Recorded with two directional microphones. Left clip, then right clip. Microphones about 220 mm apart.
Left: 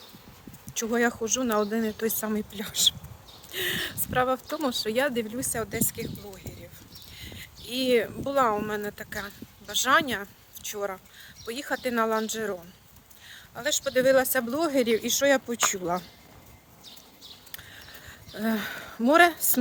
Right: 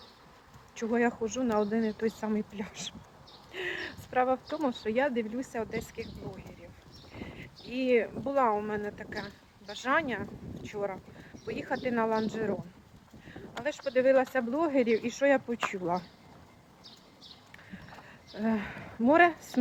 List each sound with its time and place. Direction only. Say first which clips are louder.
0.8 s speech: left 3 dB; 20° left (ahead or behind)
3.5 s a sound: left 6 dB; 15° left (ahead or behind)
4.9 s speech: left 1 dB; 20° left (ahead or behind)
7.2 s speech: left 2 dB; 20° left (ahead or behind)
18.3 s speech: left 3 dB; 20° left (ahead or behind)